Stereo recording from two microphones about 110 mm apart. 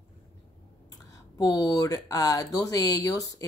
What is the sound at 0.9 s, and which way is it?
Speech, 35° left (ahead or behind).